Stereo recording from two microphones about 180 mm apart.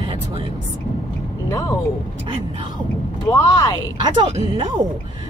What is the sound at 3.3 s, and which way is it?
Speech, 20° left (ahead or behind).